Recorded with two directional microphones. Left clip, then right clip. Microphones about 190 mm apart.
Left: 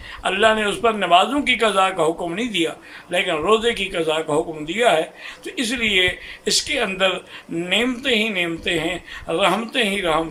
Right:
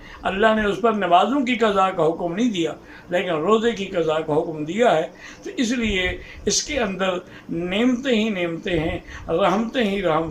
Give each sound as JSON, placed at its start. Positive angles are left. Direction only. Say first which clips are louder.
{"t": 0.2, "sound": "a man's voice", "louder": "left 2 dB", "side_deg": 10}